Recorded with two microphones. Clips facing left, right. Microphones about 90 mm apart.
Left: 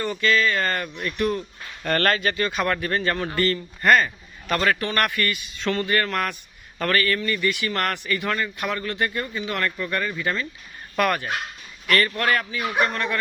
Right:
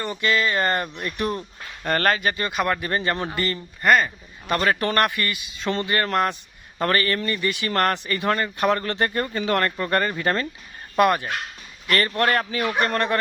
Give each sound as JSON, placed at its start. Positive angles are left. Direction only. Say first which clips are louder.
{"t": 0.0, "sound": "a man's voice", "louder": "left 1 dB", "side_deg": -10}
{"t": 1.8, "sound": "speech", "louder": "even", "side_deg": -15}
{"t": 2.8, "sound": "a man's voice", "louder": "even", "side_deg": -20}
{"t": 4.0, "sound": "a man's voice", "louder": "even", "side_deg": -20}
{"t": 4.6, "sound": "a man's voice", "louder": "right 2 dB", "side_deg": -30}
{"t": 9.2, "sound": "speech", "louder": "right 3 dB", "side_deg": -60}
{"t": 9.5, "sound": "speech", "louder": "right 5 dB", "side_deg": -40}
{"t": 10.9, "sound": "a man's voice", "louder": "right 4 dB", "side_deg": -20}
{"t": 11.9, "sound": "speech", "louder": "even", "side_deg": -35}
{"t": 12.5, "sound": "speech", "louder": "right 1 dB", "side_deg": -55}